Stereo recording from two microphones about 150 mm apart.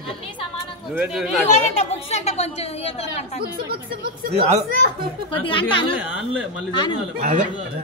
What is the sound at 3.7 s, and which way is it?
A woman's voice, 80° right.